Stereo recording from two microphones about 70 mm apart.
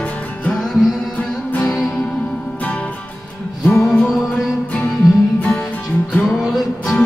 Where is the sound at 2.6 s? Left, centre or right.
Centre.